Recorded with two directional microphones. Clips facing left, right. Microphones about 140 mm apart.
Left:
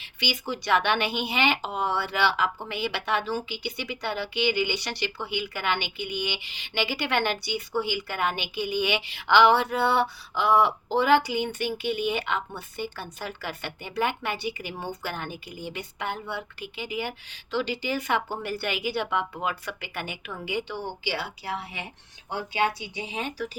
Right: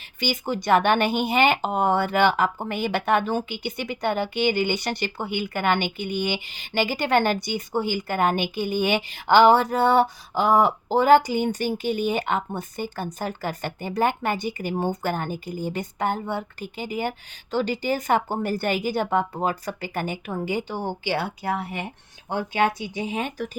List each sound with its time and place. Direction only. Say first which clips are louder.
0.2 s speech: right 5 dB; 45° right (ahead or behind)